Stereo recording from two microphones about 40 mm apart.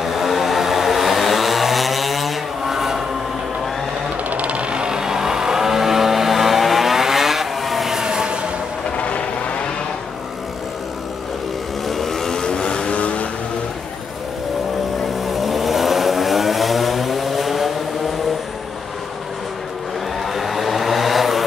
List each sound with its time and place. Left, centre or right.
0.0 s vehicle: centre
4.3 s vehicle: right; by 7.9 s centre
7.9 s train: centre
8.9 s vehicle: left
11.9 s vehicle: centre; by 13.3 s left
15.2 s vehicle: centre
20.3 s vehicle: centre